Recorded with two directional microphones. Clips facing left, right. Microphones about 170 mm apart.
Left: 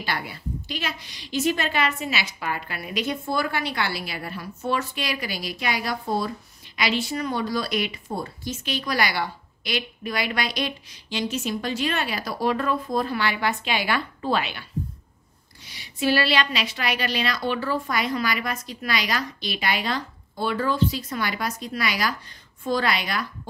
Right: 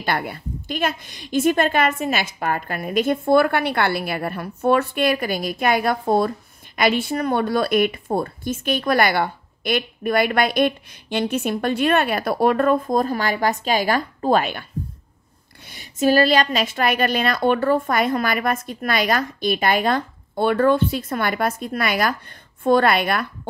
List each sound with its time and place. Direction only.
0.0 s a woman's voice: 55° right (ahead or behind)